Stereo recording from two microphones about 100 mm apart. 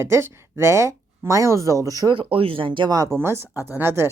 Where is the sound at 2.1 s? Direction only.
65° right (ahead or behind).